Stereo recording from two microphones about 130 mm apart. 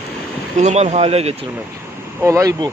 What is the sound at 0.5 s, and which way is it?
Speech, 60° right (ahead or behind).